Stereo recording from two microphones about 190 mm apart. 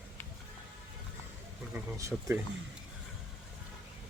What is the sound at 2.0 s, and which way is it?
Speech, 15° right (ahead or behind).